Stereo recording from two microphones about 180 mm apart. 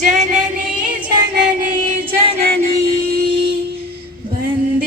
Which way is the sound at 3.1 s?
60° right (ahead or behind).